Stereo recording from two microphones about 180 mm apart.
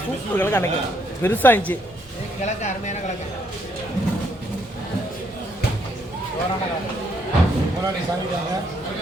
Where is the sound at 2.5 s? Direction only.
40° left (ahead or behind).